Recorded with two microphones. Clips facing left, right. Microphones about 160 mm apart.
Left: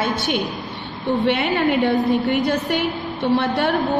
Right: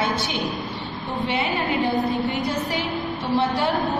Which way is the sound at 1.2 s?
65° left (ahead or behind).